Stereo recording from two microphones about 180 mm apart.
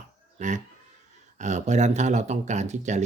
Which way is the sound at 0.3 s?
45° right (ahead or behind).